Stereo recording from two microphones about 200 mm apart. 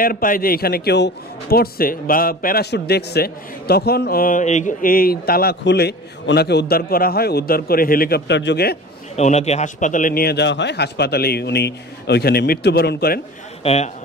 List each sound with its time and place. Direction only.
0.0 s a man's voice: 45° left (ahead or behind)
9.1 s a man's voice: 35° left (ahead or behind); by 13.2 s 50° left (ahead or behind)
13.6 s a man's voice: 30° left (ahead or behind)